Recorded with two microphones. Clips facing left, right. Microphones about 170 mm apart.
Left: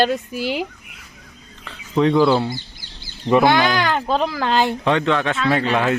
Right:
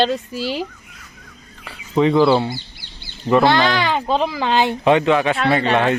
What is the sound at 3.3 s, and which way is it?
Speech, 15° left (ahead or behind).